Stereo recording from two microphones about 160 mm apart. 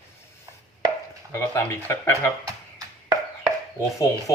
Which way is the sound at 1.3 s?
15° left (ahead or behind).